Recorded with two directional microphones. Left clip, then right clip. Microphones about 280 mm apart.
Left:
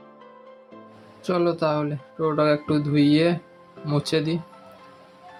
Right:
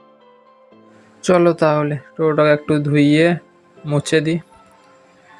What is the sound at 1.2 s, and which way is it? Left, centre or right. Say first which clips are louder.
Speech: right 9 dB; right.